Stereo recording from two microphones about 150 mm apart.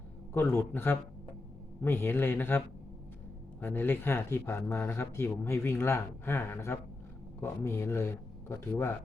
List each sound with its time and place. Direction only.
0.3 s speech: 15° left (ahead or behind)